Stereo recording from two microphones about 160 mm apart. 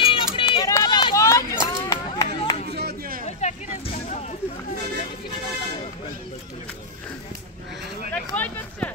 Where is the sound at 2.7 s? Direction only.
85° right; by 3.3 s 65° right (ahead or behind).